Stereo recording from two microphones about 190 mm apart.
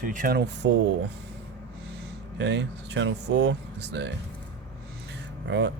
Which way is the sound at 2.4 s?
70° right (ahead or behind).